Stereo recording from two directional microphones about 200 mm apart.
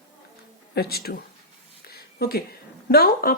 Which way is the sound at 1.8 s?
50° left (ahead or behind).